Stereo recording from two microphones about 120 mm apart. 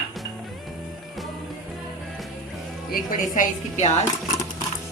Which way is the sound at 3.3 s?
75° left (ahead or behind).